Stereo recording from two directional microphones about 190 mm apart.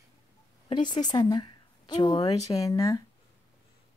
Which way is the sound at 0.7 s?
25° left (ahead or behind).